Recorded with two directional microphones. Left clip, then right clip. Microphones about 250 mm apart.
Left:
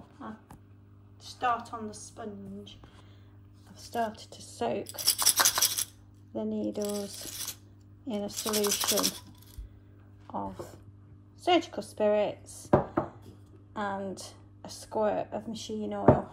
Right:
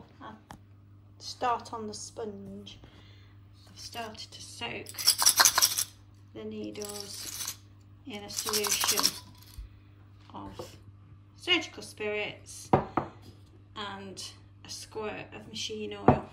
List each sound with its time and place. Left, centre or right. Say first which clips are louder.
1.2 s a woman's voice: left 1 dB; centre
10.4 s speech: left 4 dB; centre
12.4 s a sound: left 1 dB; centre
13.7 s a woman's voice: left 6 dB; right
14.1 s a sound: right 1 dB; centre
14.9 s a woman's voice: left 9 dB; centre
15.1 s speech: left 6 dB; centre
15.8 s a woman's voice: left 4 dB; centre